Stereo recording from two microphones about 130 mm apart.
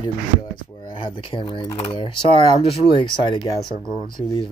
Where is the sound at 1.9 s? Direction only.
40° left (ahead or behind).